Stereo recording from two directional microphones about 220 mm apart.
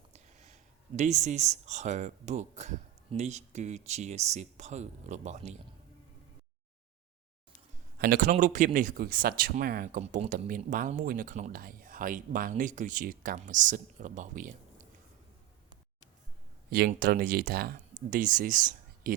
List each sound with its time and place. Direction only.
0.1 s a sound: 30° right (ahead or behind)
0.9 s speech: 30° right (ahead or behind)
7.9 s speech: 45° right (ahead or behind)
16.6 s speech: 45° right (ahead or behind)